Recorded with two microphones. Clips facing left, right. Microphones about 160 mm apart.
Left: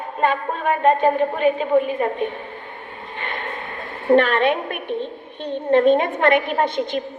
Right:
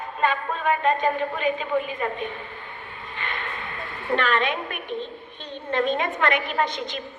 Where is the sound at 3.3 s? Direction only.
45° left (ahead or behind).